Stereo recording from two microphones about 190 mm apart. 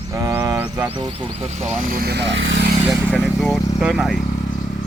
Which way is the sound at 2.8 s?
10° right (ahead or behind).